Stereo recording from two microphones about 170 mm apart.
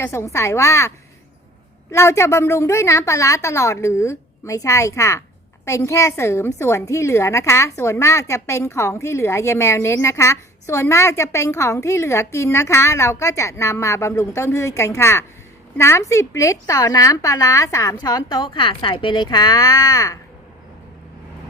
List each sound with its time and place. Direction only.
0.0 s a woman's voice: 15° left (ahead or behind)